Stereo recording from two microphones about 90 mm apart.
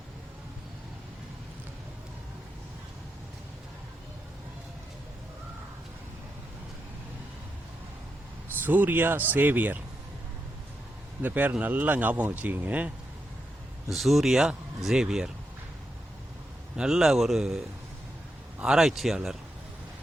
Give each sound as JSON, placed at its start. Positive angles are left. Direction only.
{"t": 8.6, "sound": "speech", "side_deg": -20}
{"t": 11.2, "sound": "speech", "side_deg": -20}
{"t": 13.9, "sound": "speech", "side_deg": 0}
{"t": 16.7, "sound": "speech", "side_deg": -5}
{"t": 18.6, "sound": "speech", "side_deg": -5}